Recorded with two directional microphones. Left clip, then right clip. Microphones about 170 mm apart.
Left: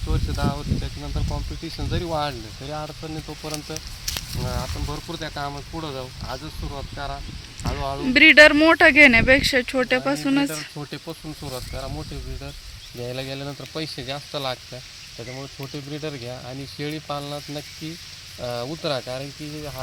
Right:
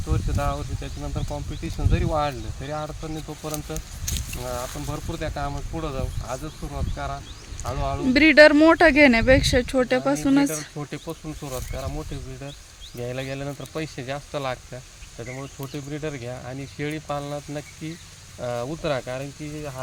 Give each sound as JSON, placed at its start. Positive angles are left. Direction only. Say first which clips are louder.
{"t": 0.1, "sound": "speech", "louder": "even", "side_deg": -15}
{"t": 3.8, "sound": "speech", "louder": "left 3 dB", "side_deg": -20}